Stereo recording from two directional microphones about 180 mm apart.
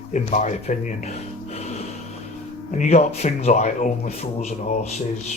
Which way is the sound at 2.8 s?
35° left (ahead or behind).